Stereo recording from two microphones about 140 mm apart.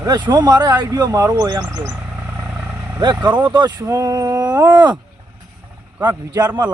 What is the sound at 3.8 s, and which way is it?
Speech, 20° right (ahead or behind).